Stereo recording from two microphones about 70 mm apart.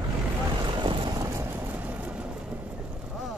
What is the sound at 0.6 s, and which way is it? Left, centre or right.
Boat, right.